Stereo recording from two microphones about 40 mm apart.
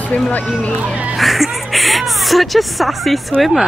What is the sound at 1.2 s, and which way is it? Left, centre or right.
Speech, centre.